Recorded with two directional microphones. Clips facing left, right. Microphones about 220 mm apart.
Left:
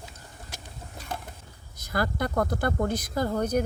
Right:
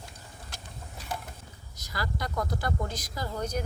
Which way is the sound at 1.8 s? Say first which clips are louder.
Left 7 dB; 55° left (ahead or behind).